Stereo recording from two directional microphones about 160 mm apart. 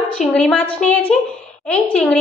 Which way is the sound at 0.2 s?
5° left (ahead or behind).